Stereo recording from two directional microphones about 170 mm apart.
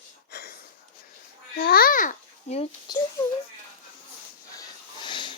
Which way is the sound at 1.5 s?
60° left (ahead or behind).